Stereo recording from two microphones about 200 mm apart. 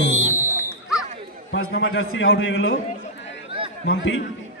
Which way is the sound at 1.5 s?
75° left (ahead or behind).